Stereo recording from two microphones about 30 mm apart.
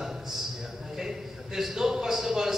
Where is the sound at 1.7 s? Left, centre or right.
Centre.